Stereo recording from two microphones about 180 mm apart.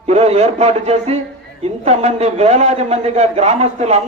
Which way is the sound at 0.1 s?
35° right (ahead or behind).